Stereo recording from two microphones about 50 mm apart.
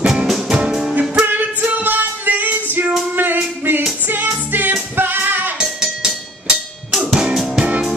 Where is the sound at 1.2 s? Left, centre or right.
Right.